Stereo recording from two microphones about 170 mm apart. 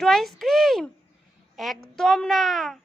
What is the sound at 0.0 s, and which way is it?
A woman's voice, centre (ahead or behind).